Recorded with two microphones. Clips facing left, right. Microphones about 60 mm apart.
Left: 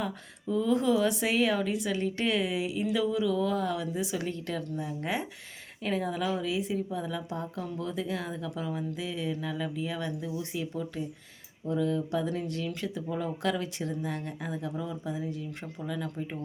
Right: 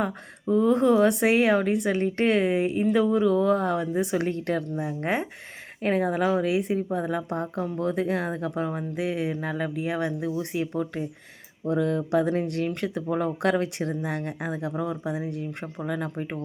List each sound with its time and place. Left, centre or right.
0.0 s speech: right